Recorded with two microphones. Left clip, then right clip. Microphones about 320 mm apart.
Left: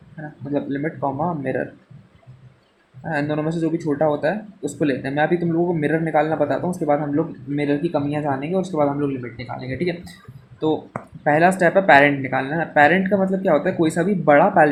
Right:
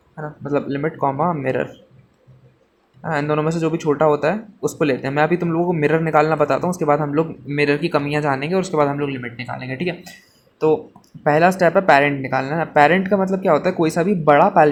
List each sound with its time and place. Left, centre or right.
0.5 s speech: right
3.0 s speech: centre
11.2 s speech: right